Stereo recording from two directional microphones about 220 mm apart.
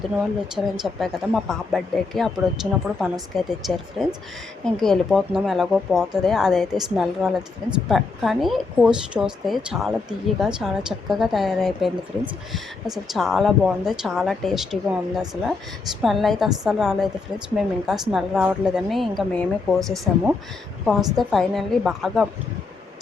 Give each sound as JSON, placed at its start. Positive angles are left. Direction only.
{"t": 0.5, "sound": "speech", "side_deg": 0}